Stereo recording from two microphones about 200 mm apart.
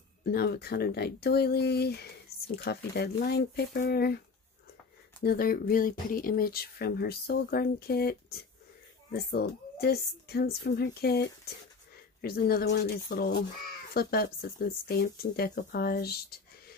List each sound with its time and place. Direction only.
0.2 s speech: 50° left (ahead or behind)
5.2 s speech: 50° left (ahead or behind)